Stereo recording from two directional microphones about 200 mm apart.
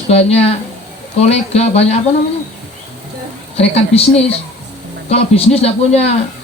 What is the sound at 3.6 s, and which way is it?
Speech, 30° left (ahead or behind).